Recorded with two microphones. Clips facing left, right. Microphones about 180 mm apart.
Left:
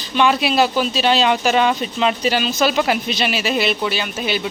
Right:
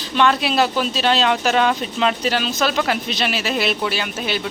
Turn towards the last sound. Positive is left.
turn(degrees=0)  # may be behind; listen again after turning